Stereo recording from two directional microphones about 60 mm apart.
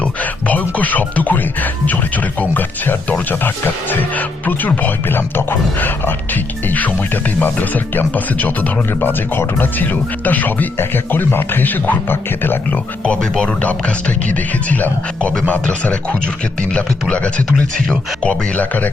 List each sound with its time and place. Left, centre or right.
0.0 s speech: left
13.1 s speech: centre